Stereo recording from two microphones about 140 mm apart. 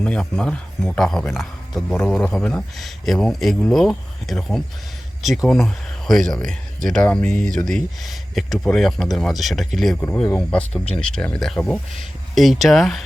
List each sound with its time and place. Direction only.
0.0 s a man's voice: 5° left (ahead or behind)